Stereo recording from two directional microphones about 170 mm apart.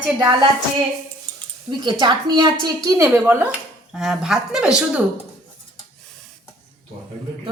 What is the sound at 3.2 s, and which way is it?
A woman's voice, 10° right (ahead or behind).